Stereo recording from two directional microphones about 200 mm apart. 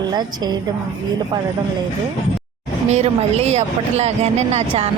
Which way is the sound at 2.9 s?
35° right (ahead or behind).